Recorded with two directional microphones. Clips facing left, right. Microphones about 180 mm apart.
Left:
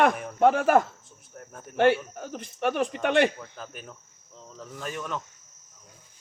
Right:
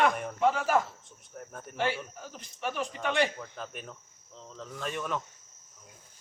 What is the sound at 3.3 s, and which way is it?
Speech, centre (ahead or behind).